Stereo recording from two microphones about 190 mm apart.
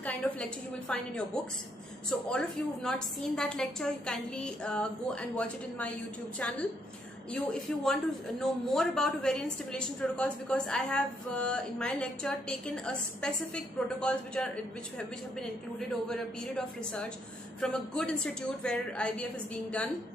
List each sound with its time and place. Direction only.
0.0 s a man's voice: 5° left (ahead or behind)
7.3 s a man's voice: 5° left (ahead or behind)
16.1 s a man's voice: 5° left (ahead or behind)